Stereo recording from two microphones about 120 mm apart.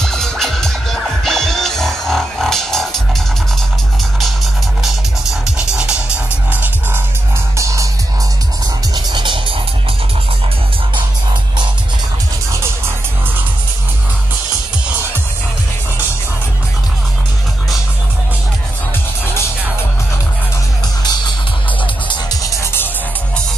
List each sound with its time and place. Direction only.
0.0 s music: 5° left (ahead or behind)
6.5 s music: 15° right (ahead or behind)
7.5 s music: 25° right (ahead or behind)
8.9 s music: 40° right (ahead or behind)
12.5 s music: 20° right (ahead or behind)
22.1 s music: 30° left (ahead or behind)